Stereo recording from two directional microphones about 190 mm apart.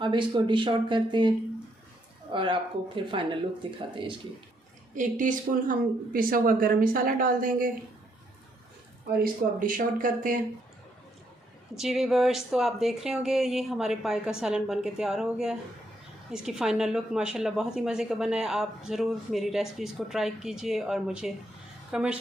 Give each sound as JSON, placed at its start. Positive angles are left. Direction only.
{"t": 0.0, "sound": "speech", "side_deg": -25}
{"t": 2.3, "sound": "speech", "side_deg": -25}
{"t": 4.9, "sound": "a woman's voice", "side_deg": -40}
{"t": 9.2, "sound": "a woman's voice", "side_deg": -45}
{"t": 11.7, "sound": "a woman's voice", "side_deg": 0}